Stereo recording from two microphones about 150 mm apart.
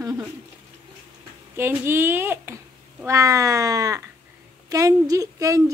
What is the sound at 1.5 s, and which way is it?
A woman's voice, 15° right (ahead or behind).